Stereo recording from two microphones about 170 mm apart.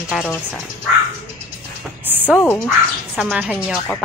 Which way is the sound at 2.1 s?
10° right (ahead or behind).